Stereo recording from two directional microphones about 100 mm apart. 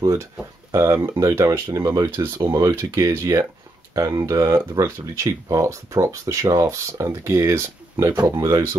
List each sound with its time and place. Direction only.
0.0 s speech: 35° right (ahead or behind)